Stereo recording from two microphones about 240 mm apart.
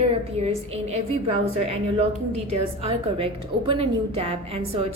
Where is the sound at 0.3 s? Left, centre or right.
Right.